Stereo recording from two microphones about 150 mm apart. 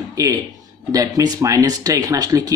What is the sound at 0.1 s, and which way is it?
Speech, 25° right (ahead or behind).